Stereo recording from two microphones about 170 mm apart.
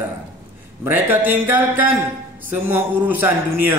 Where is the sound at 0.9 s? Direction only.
10° right (ahead or behind).